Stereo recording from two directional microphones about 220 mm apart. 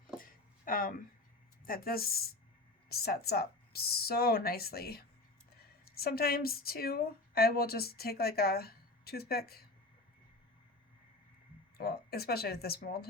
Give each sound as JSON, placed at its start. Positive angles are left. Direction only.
{"t": 0.2, "sound": "a sound", "side_deg": 40}
{"t": 1.6, "sound": "a woman's voice", "side_deg": 40}
{"t": 11.8, "sound": "a woman's voice", "side_deg": 45}